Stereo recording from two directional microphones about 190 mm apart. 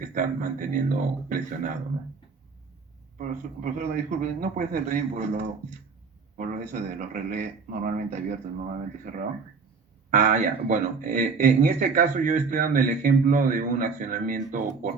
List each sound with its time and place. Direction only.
0.0 s speech: 45° right (ahead or behind)
3.2 s speech: 45° right (ahead or behind)